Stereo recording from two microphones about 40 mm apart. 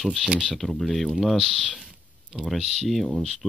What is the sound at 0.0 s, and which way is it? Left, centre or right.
Speech, centre.